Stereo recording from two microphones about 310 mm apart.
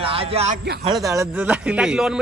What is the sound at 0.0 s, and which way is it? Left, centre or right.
A man's voice, centre.